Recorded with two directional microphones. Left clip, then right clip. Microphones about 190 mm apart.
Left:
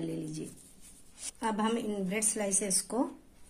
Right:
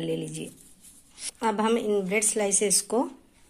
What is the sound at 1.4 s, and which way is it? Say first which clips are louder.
A woman's voice: right 7 dB; 30° right (ahead or behind).